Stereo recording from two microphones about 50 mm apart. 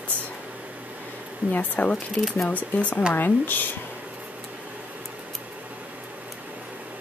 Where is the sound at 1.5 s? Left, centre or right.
Left.